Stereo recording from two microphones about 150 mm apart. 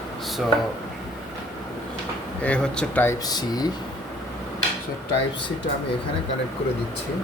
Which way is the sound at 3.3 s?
25° left (ahead or behind).